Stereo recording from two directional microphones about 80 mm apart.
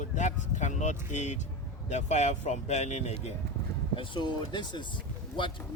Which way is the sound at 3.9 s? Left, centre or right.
Left.